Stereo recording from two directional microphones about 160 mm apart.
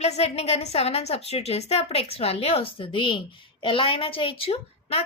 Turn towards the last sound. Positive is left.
turn(degrees=40)  # may be behind; listen again after turning